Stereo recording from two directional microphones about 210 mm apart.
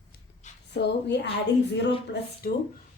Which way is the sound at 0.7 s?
55° left (ahead or behind).